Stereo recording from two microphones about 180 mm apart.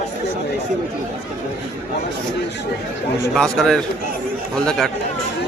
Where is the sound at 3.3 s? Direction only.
5° left (ahead or behind).